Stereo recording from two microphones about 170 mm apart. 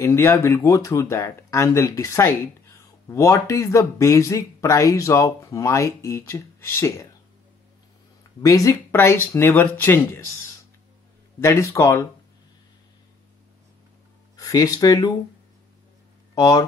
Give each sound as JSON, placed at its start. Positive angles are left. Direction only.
{"t": 0.0, "sound": "speech", "side_deg": 15}
{"t": 8.4, "sound": "speech", "side_deg": 20}
{"t": 14.3, "sound": "speech", "side_deg": 20}
{"t": 16.3, "sound": "speech", "side_deg": 20}